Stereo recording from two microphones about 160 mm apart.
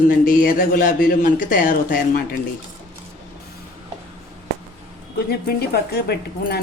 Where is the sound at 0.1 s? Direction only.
60° left (ahead or behind).